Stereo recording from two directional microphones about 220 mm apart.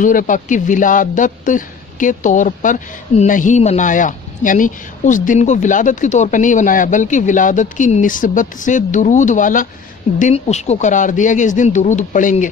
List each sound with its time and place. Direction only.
0.0 s speech: 35° left (ahead or behind)